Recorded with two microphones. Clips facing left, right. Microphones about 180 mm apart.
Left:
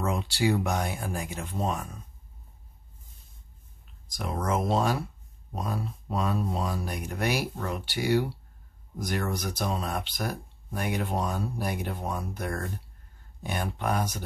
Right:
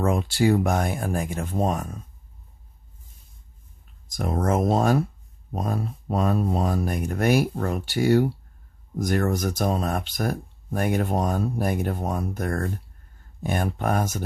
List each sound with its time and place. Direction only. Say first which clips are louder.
0.0 s speech: right 6 dB; 50° right (ahead or behind)
4.1 s speech: right 5 dB; 45° right (ahead or behind)